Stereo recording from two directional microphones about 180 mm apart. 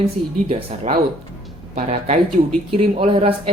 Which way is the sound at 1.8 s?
35° right (ahead or behind).